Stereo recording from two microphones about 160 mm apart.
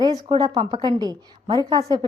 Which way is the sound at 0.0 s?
25° right (ahead or behind).